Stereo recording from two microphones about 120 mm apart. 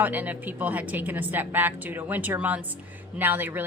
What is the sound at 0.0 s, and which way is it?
A woman's voice, 15° right (ahead or behind).